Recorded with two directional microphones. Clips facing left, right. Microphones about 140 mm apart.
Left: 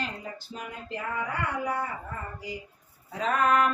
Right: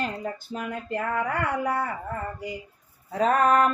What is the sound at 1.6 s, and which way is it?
Dog, 60° right (ahead or behind).